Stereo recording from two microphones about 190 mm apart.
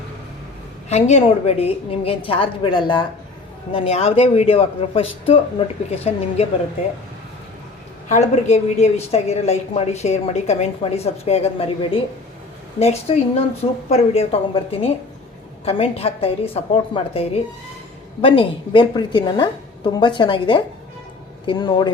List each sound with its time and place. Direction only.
0.9 s a woman's voice: 35° left (ahead or behind)
8.1 s a woman's voice: 35° left (ahead or behind)